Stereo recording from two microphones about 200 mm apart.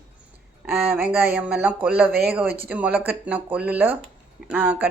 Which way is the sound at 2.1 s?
50° right (ahead or behind).